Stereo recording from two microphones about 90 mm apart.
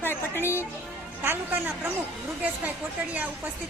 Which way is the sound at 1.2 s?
20° right (ahead or behind).